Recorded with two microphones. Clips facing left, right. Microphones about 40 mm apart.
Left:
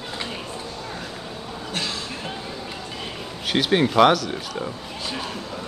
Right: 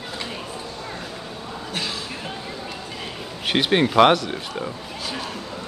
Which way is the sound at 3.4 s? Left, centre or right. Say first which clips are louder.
Right 1 dB; right.